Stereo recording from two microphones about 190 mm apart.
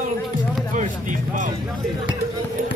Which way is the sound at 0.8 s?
40° right (ahead or behind).